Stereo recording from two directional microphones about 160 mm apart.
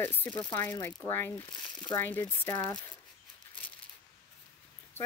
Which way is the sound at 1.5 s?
30° left (ahead or behind).